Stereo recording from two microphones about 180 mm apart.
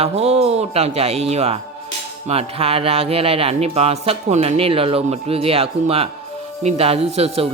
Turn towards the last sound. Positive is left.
turn(degrees=-35)  # may be behind; listen again after turning